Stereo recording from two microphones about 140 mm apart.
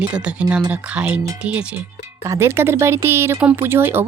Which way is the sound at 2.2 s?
20° right (ahead or behind).